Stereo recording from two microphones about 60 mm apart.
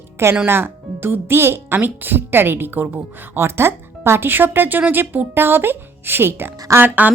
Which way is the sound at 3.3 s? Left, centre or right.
Right.